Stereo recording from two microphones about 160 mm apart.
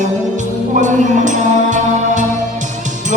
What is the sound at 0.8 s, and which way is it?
Music, 50° right (ahead or behind).